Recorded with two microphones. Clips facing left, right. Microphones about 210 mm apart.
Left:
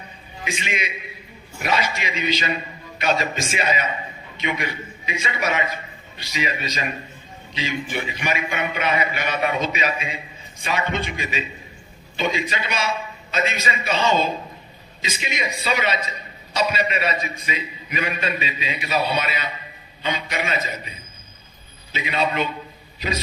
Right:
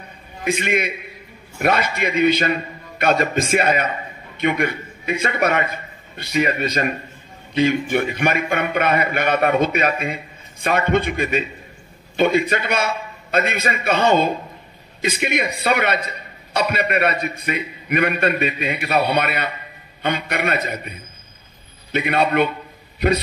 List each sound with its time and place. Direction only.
0.4 s a man's voice: 55° right (ahead or behind)